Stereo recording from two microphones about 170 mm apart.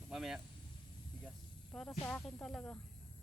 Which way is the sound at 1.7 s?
5° left (ahead or behind).